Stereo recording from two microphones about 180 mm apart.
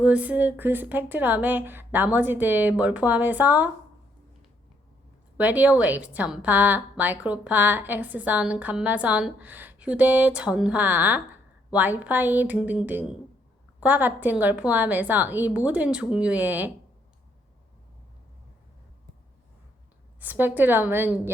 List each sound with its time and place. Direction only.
0.0 s a woman's voice: 5° right (ahead or behind)
5.4 s a woman's voice: 10° right (ahead or behind)
20.1 s a woman's voice: 10° right (ahead or behind)